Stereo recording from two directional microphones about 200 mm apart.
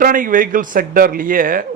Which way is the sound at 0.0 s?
45° right (ahead or behind).